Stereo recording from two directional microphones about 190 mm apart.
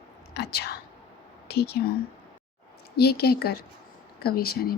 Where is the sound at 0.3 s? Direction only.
55° left (ahead or behind).